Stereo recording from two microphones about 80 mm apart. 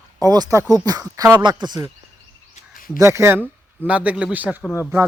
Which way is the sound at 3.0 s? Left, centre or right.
Right.